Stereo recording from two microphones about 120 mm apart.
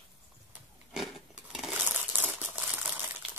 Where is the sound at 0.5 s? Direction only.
Centre (ahead or behind).